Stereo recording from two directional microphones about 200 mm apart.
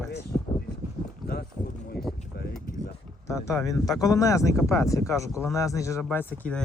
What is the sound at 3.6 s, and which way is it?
Speech, 15° left (ahead or behind).